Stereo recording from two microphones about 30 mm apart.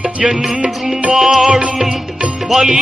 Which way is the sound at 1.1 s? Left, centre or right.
Centre.